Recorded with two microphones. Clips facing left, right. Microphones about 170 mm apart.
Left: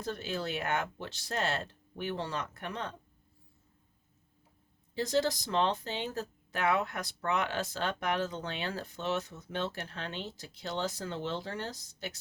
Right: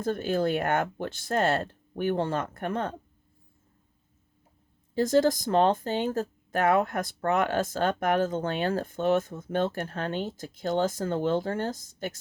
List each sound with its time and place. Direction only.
0.0 s speech: 50° right (ahead or behind)
4.9 s speech: 50° right (ahead or behind)